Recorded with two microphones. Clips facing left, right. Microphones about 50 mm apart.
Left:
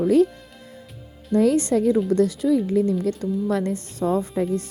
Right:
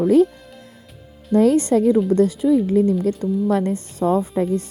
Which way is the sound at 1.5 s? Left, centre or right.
Right.